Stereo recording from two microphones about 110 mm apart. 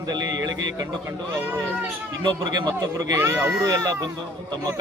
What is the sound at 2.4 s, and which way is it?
Speech, 35° right (ahead or behind).